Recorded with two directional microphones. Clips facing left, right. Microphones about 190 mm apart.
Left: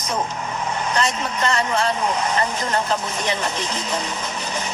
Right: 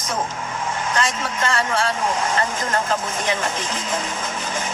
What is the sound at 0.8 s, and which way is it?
Speech, 50° right (ahead or behind).